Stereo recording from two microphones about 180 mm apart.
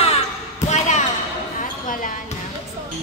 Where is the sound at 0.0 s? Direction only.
35° left (ahead or behind).